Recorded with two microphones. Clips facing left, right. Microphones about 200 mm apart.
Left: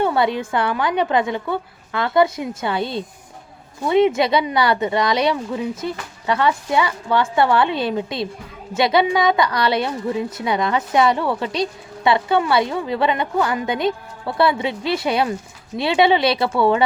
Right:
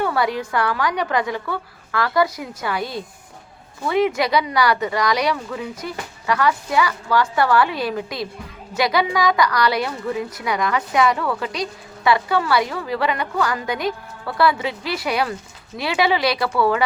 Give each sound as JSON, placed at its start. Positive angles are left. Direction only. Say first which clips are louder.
{"t": 0.0, "sound": "a woman's voice", "louder": "left 3 dB", "side_deg": 25}